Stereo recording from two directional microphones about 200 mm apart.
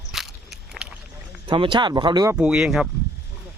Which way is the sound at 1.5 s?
25° right (ahead or behind).